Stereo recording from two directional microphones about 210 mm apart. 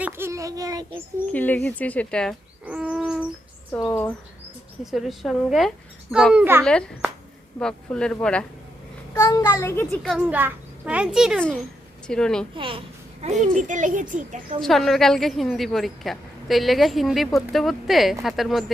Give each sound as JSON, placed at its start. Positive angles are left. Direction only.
{"t": 0.0, "sound": "a child's voice", "side_deg": -10}
{"t": 1.3, "sound": "speech", "side_deg": 5}
{"t": 2.6, "sound": "owl", "side_deg": -5}
{"t": 3.7, "sound": "a woman's voice", "side_deg": 10}
{"t": 6.7, "sound": "a woman's voice", "side_deg": 5}
{"t": 9.1, "sound": "speech", "side_deg": 15}
{"t": 10.0, "sound": "a woman's voice", "side_deg": 0}
{"t": 12.5, "sound": "a child's voice", "side_deg": -25}
{"t": 13.4, "sound": "a child's voice", "side_deg": -35}
{"t": 14.6, "sound": "a woman's voice", "side_deg": 0}